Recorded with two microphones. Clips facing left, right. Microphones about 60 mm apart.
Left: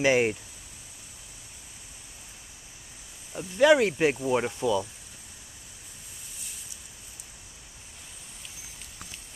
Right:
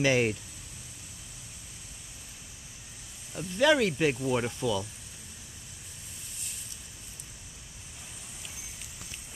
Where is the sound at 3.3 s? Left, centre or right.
Centre.